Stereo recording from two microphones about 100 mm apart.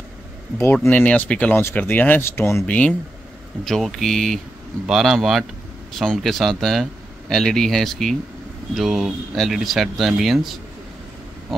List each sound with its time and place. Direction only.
0.8 s speech: 15° left (ahead or behind)
2.6 s speech: 15° left (ahead or behind)
3.6 s speech: centre (ahead or behind)